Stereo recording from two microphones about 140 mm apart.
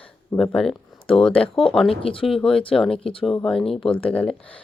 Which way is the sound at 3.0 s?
40° left (ahead or behind).